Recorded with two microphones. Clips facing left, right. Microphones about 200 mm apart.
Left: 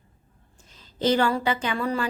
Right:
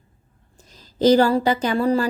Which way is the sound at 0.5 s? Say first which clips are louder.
Right 6 dB; 40° right (ahead or behind).